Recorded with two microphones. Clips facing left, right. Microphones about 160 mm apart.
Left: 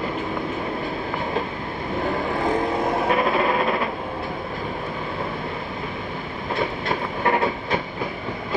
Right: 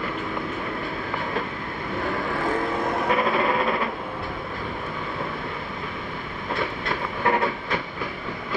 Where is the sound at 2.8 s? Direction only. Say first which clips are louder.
Left 1 dB; 25° left (ahead or behind).